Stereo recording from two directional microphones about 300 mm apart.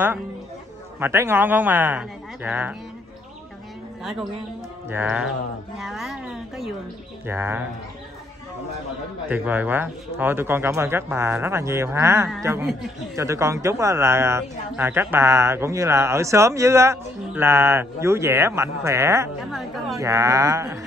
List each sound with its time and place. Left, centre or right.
0.9 s speech: centre
4.0 s speech: centre
9.3 s speech: centre